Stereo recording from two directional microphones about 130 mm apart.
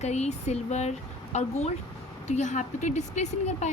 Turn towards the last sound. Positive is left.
turn(degrees=60)  # may be behind; listen again after turning